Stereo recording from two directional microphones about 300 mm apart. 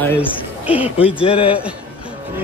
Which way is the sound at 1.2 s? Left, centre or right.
Centre.